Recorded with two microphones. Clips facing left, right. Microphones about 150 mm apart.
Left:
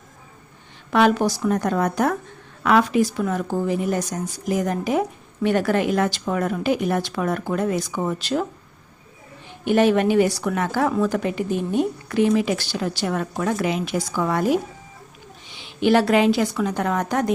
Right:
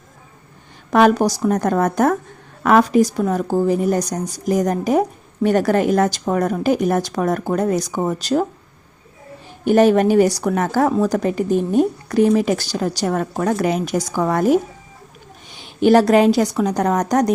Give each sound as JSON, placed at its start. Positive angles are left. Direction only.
{"t": 0.9, "sound": "a woman's voice", "side_deg": -40}
{"t": 9.6, "sound": "a woman's voice", "side_deg": -40}